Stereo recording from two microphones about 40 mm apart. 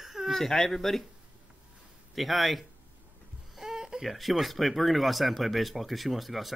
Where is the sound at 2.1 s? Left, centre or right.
Centre.